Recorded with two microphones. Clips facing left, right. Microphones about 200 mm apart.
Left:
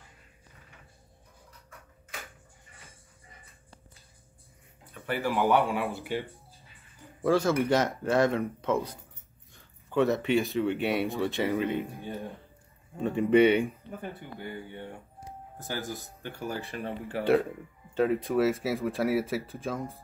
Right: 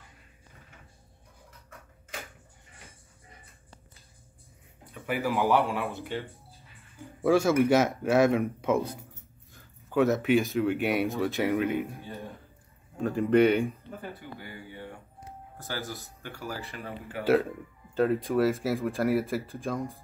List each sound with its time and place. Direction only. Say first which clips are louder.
5.3 s speech: left 1 dB; centre (ahead or behind)
7.2 s speech: right 2 dB; 15° right (ahead or behind)
12.9 s speech: even; centre (ahead or behind)
14.8 s speech: left 1 dB; 15° left (ahead or behind)
17.2 s speech: right 1 dB; centre (ahead or behind)